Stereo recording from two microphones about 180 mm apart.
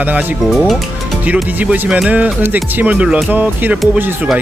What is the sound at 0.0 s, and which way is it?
Speech, 10° right (ahead or behind).